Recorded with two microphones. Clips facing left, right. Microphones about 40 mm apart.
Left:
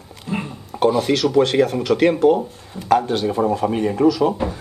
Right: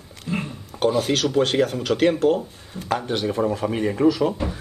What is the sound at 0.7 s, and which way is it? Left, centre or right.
Speech, centre.